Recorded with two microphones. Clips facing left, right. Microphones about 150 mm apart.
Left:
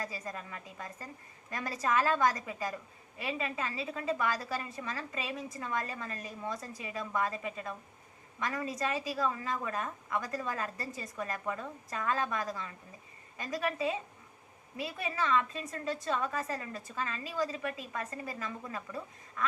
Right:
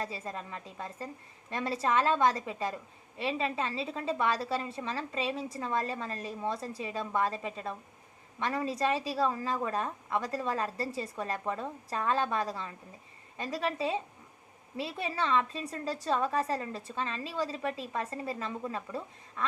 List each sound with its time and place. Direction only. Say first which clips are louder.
0.0 s a woman's voice: right 3 dB; 25° right (ahead or behind)